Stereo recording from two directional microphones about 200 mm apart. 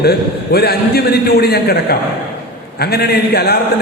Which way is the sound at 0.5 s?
50° left (ahead or behind).